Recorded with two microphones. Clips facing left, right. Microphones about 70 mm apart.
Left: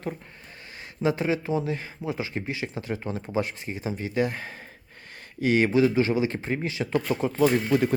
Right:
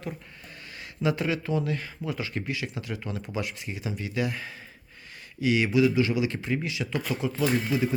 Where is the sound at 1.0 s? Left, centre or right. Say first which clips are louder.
Left 2 dB; left.